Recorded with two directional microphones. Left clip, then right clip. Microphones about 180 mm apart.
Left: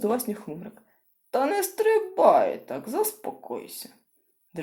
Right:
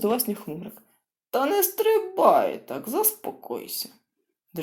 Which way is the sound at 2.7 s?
25° right (ahead or behind).